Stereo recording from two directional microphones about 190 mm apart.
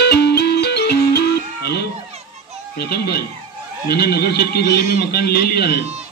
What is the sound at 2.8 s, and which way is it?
A man's voice, 55° left (ahead or behind).